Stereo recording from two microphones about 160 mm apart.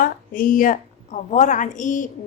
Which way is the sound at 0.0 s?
60° left (ahead or behind).